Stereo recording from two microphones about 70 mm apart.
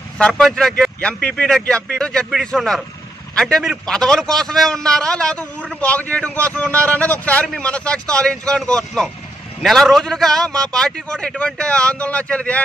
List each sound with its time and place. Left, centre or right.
0.3 s a man's voice: centre